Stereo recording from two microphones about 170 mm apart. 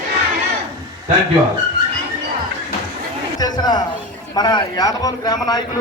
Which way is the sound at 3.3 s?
25° left (ahead or behind).